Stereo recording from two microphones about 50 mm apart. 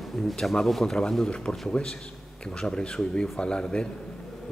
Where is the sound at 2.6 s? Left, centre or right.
Centre.